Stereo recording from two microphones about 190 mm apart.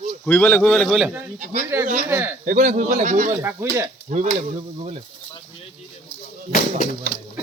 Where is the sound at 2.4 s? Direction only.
40° right (ahead or behind).